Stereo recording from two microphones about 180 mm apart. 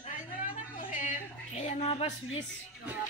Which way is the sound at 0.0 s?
45° left (ahead or behind).